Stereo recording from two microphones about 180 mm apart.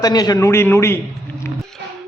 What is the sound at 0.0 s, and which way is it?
Speech, 20° left (ahead or behind).